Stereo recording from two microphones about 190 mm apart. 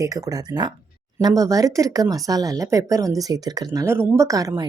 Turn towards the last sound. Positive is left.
turn(degrees=-20)  # may be behind; listen again after turning